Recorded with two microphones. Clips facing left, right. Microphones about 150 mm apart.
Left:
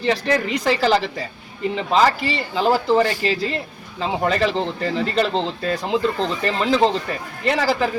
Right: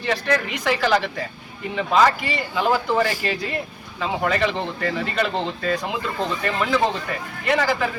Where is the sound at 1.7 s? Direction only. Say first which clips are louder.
Even; 25° left (ahead or behind).